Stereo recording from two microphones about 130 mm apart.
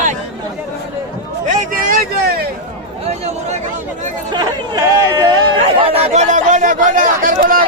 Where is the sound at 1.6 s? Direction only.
90° right.